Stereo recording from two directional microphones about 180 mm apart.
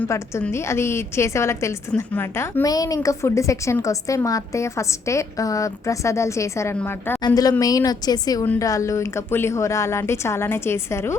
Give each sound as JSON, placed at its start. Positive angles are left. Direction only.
{"t": 0.0, "sound": "a woman's voice", "side_deg": 10}